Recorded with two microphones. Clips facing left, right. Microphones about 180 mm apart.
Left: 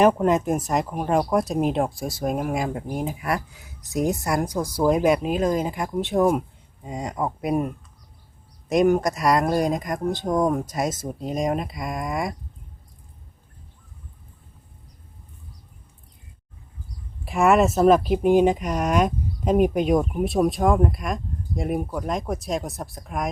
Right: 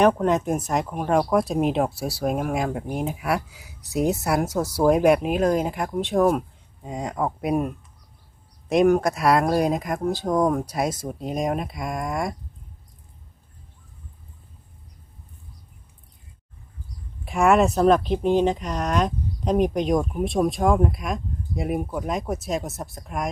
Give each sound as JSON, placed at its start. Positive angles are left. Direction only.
{"t": 0.0, "sound": "speech", "side_deg": 5}
{"t": 8.7, "sound": "speech", "side_deg": 0}
{"t": 17.2, "sound": "speech", "side_deg": 0}